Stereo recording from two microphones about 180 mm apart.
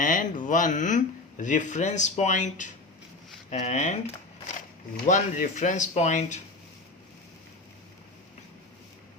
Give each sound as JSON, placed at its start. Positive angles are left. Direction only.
{"t": 0.0, "sound": "speech", "side_deg": 45}